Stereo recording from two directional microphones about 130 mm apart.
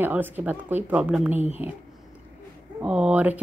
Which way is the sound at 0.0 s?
15° right (ahead or behind).